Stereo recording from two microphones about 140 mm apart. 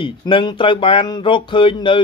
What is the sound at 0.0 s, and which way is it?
Speech, 35° left (ahead or behind).